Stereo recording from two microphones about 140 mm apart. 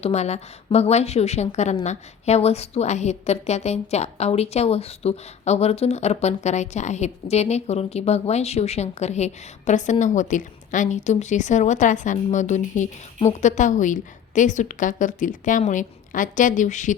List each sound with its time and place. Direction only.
0.0 s a woman's voice: 50° left (ahead or behind)